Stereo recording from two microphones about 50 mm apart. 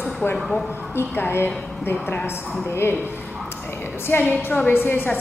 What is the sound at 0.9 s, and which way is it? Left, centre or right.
A woman's voice, left.